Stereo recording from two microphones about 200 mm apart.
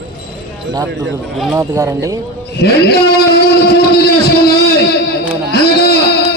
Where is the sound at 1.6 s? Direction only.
15° right (ahead or behind).